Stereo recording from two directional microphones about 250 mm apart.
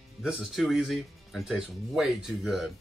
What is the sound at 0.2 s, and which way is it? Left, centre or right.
Speech, centre.